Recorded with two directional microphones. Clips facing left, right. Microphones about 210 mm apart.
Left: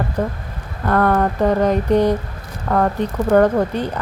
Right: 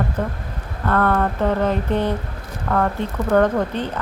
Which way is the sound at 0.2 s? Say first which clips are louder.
Left 3 dB; 10° left (ahead or behind).